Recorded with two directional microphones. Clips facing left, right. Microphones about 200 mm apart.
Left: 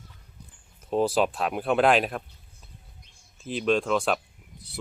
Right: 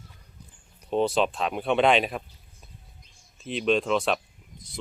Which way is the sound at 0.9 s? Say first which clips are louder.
Even; 5° left (ahead or behind).